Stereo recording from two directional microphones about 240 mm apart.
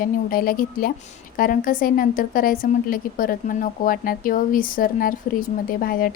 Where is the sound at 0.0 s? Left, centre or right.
Left.